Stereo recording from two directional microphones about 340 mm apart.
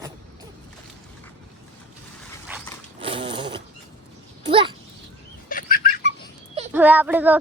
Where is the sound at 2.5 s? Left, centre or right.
Centre.